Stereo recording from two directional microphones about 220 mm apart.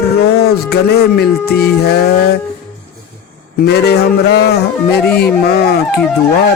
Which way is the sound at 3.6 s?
50° left (ahead or behind).